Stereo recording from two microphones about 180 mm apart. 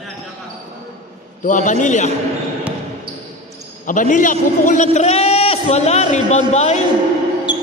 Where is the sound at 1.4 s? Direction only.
45° left (ahead or behind).